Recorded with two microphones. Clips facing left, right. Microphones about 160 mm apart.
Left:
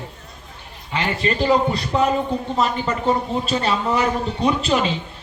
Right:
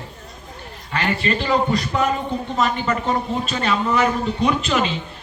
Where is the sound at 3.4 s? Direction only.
30° left (ahead or behind).